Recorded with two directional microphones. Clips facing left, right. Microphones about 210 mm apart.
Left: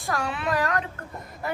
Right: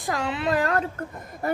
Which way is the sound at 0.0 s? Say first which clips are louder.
Right 2 dB; 20° right (ahead or behind).